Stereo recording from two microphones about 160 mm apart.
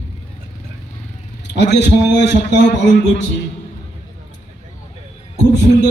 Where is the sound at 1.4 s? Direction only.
90° left.